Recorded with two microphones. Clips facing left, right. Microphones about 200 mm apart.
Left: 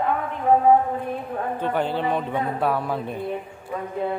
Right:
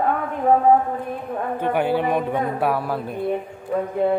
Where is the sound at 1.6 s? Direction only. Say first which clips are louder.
Right 4 dB; 10° right (ahead or behind).